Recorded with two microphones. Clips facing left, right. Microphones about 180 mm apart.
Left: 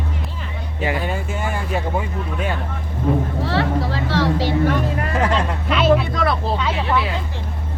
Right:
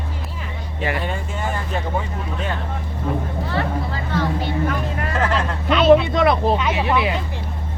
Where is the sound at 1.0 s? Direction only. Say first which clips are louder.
Left 1 dB; 5° left (ahead or behind).